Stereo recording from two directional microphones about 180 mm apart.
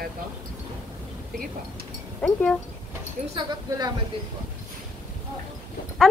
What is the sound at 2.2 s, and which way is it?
Speech, 5° left (ahead or behind).